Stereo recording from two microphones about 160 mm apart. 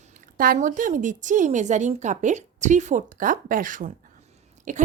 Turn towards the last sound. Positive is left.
turn(degrees=-50)  # may be behind; listen again after turning